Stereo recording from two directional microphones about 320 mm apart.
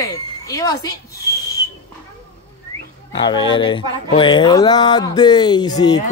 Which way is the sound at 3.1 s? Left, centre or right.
Centre.